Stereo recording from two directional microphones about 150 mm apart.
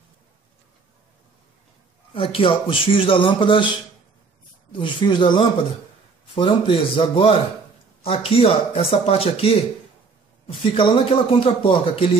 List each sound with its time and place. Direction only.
2.1 s speech: 40° left (ahead or behind)
4.7 s speech: 30° left (ahead or behind)
10.7 s speech: 40° left (ahead or behind)